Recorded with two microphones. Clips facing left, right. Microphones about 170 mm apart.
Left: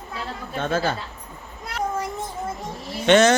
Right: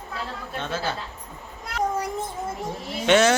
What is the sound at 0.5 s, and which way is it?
Speech, 50° left (ahead or behind).